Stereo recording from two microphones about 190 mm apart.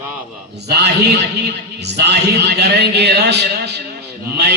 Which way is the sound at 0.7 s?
60° right (ahead or behind).